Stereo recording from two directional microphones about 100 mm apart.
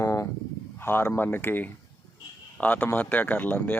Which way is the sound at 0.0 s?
30° left (ahead or behind).